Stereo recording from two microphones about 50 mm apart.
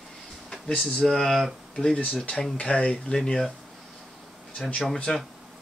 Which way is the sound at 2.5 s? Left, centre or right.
Left.